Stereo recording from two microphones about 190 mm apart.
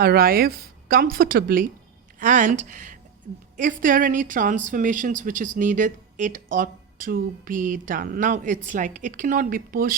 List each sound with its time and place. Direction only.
0.0 s a woman's voice: 50° right (ahead or behind)